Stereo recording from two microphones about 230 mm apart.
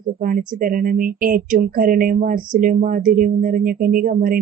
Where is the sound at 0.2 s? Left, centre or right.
Right.